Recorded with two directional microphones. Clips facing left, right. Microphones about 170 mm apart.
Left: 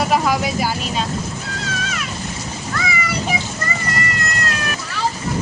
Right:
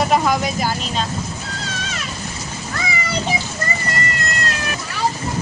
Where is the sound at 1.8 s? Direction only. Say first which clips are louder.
Left 2 dB; 30° right (ahead or behind).